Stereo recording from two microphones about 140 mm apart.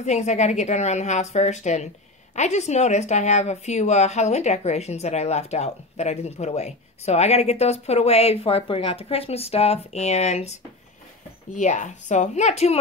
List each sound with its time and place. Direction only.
0.0 s speech: 55° left (ahead or behind)